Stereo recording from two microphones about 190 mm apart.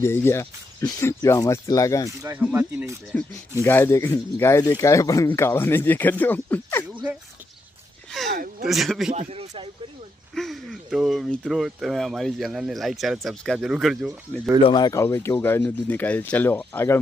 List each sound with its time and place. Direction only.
0.0 s speech: 10° left (ahead or behind)
2.0 s speech: 10° right (ahead or behind)
3.6 s speech: 15° left (ahead or behind)
6.8 s speech: 10° right (ahead or behind)
8.3 s speech: 50° right (ahead or behind)
8.6 s speech: centre (ahead or behind)
9.1 s speech: 30° right (ahead or behind)
10.3 s speech: centre (ahead or behind)
14.6 s speech: 20° left (ahead or behind)